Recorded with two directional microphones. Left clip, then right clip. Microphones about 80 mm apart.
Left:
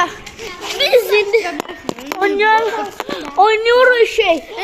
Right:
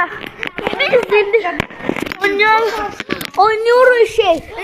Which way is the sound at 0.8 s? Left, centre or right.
Centre.